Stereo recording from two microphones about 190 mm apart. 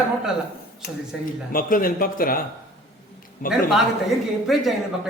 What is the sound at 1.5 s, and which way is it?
Speech, 50° left (ahead or behind).